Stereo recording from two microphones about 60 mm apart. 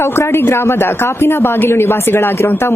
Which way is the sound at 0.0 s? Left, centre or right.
Left.